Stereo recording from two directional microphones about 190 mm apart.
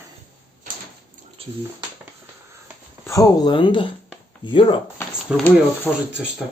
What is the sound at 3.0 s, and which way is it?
Speech, 15° left (ahead or behind).